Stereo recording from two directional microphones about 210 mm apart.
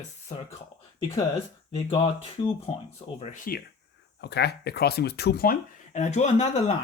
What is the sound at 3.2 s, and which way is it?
Speech, 35° left (ahead or behind).